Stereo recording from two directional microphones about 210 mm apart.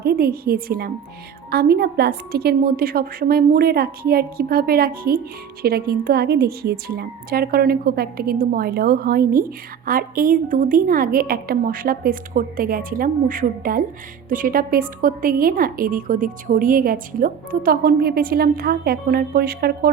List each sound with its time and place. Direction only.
0.0 s a woman's voice: 45° right (ahead or behind)